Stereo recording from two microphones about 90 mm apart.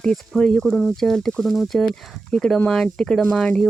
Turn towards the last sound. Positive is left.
turn(degrees=5)  # may be behind; listen again after turning